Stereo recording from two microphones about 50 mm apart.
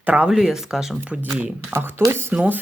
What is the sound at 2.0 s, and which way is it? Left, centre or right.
Speech, right.